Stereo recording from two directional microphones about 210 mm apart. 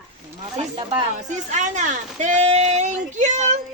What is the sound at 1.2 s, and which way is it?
Speech, 35° right (ahead or behind).